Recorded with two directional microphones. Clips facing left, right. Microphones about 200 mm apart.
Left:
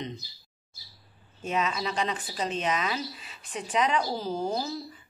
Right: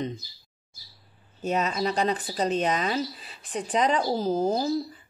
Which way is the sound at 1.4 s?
40° right (ahead or behind).